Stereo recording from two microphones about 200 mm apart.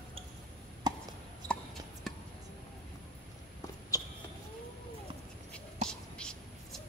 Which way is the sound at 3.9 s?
15° left (ahead or behind).